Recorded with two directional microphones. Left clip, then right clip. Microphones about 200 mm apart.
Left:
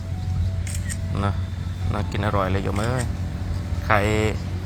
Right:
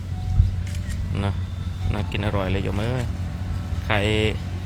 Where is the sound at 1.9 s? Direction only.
30° right (ahead or behind).